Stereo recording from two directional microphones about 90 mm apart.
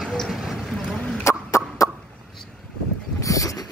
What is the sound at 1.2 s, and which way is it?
Chicken, 30° left (ahead or behind).